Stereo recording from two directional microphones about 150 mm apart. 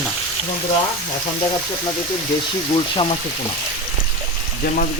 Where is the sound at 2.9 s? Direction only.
35° left (ahead or behind).